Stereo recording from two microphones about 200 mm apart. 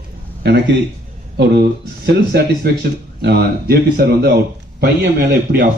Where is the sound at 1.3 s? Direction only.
55° right (ahead or behind).